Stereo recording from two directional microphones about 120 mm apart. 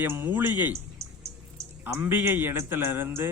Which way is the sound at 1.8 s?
15° right (ahead or behind).